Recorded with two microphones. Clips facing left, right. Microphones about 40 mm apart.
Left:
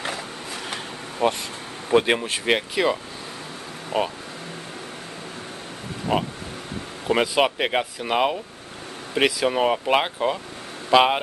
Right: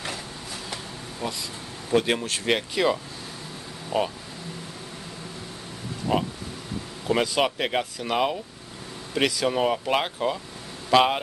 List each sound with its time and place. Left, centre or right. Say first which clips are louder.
1.2 s vehicle: left 10 dB; left
2.0 s speech: left 3 dB; left
3.9 s speech: left 1 dB; left
6.1 s speech: left 1 dB; left
7.1 s speech: left 3 dB; centre